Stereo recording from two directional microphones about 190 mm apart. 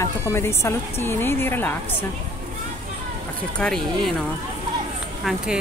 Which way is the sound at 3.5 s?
5° left (ahead or behind).